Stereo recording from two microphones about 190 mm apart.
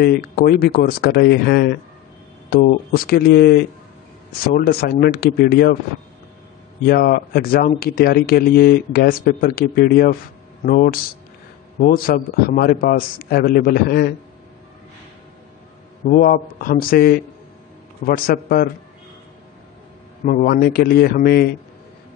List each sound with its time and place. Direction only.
0.0 s speech: 55° left (ahead or behind)
6.9 s speech: 55° left (ahead or behind)
16.1 s speech: 50° left (ahead or behind)
20.2 s speech: 50° left (ahead or behind)